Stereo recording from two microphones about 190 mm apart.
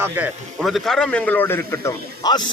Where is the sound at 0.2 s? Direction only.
10° right (ahead or behind).